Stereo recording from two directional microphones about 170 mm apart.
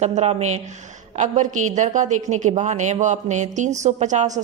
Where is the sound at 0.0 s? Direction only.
40° right (ahead or behind).